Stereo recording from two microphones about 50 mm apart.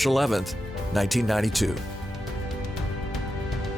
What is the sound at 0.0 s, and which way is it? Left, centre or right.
Speech, centre.